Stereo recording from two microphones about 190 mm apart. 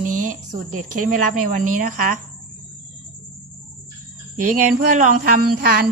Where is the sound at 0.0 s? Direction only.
45° right (ahead or behind).